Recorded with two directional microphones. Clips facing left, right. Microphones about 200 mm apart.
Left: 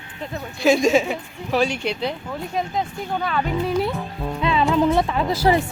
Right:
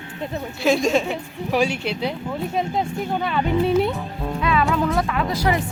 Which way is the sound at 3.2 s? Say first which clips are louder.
Right 3 dB; 20° right (ahead or behind).